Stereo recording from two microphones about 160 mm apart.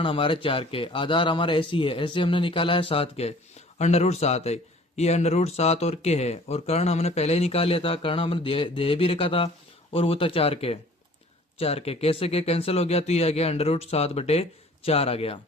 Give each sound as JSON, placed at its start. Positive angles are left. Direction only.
{"t": 0.0, "sound": "speech", "side_deg": 35}